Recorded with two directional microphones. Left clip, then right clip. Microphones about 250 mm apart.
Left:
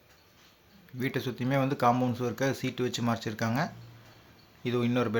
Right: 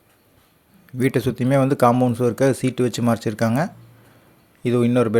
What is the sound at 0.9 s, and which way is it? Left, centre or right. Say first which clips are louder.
Speech: right 12 dB; right.